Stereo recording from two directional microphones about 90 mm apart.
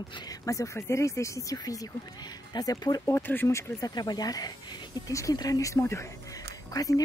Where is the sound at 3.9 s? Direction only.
50° left (ahead or behind).